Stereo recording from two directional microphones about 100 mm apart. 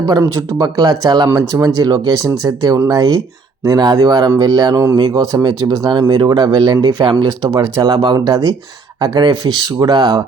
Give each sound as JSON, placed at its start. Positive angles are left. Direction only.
{"t": 0.6, "sound": "speech", "side_deg": -40}
{"t": 7.4, "sound": "speech", "side_deg": -35}